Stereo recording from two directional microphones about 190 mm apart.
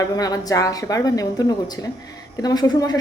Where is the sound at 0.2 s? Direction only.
20° left (ahead or behind).